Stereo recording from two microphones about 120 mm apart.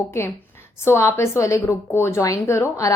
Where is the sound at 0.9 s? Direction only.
20° left (ahead or behind).